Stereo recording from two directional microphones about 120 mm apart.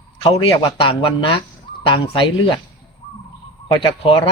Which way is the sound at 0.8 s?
45° left (ahead or behind).